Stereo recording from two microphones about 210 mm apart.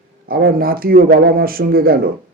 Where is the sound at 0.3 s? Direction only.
45° right (ahead or behind).